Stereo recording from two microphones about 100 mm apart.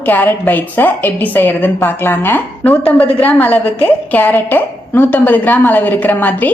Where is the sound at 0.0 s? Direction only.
15° left (ahead or behind).